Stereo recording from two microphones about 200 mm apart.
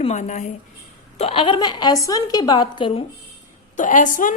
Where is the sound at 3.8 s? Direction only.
40° left (ahead or behind).